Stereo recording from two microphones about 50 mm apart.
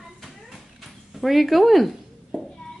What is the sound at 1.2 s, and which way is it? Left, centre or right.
Speech, centre.